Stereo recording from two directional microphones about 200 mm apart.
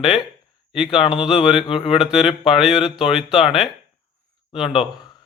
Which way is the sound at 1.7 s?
25° left (ahead or behind).